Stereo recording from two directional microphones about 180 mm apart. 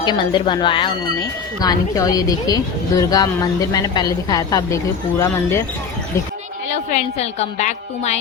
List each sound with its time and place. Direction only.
0.0 s speech: 25° left (ahead or behind)
6.7 s a woman's voice: 40° left (ahead or behind)